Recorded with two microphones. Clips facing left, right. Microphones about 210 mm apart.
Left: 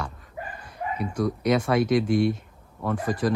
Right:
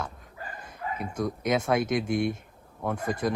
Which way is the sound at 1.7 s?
50° right (ahead or behind).